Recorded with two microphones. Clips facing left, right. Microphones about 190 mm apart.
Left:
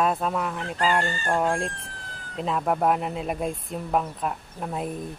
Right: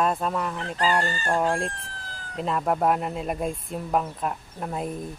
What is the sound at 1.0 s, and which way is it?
Chicken, 35° right (ahead or behind).